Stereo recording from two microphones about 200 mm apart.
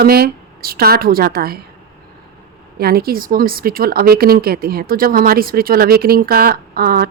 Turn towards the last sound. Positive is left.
turn(degrees=-50)  # may be behind; listen again after turning